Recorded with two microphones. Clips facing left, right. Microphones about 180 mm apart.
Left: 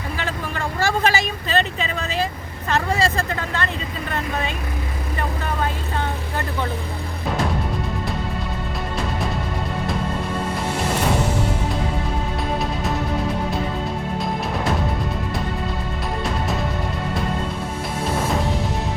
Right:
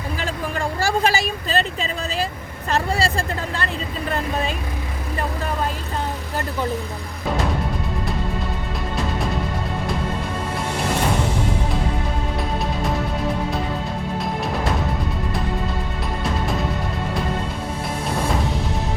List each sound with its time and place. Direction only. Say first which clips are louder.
0.8 s vehicle: left 1 dB; 35° right (ahead or behind)
3.0 s speech: left 1 dB; 35° right (ahead or behind)